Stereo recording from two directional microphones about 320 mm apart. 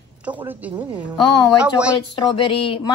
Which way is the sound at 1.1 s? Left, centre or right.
Centre.